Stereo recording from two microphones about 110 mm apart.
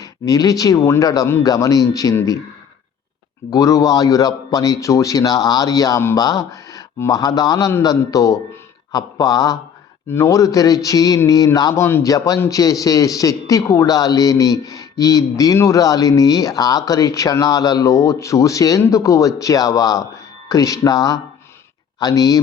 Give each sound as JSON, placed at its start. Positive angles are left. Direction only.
{"t": 0.0, "sound": "a man's voice", "side_deg": 35}
{"t": 3.5, "sound": "a man's voice", "side_deg": 30}
{"t": 10.1, "sound": "a man's voice", "side_deg": 25}
{"t": 11.7, "sound": "a man's voice", "side_deg": 25}